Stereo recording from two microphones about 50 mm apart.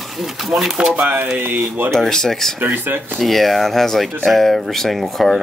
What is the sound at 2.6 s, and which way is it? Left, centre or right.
Speech, right.